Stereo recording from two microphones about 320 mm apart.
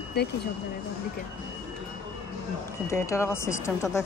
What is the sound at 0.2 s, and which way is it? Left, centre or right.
Speech, left.